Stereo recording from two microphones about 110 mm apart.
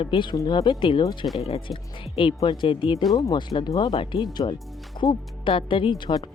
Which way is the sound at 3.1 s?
35° left (ahead or behind).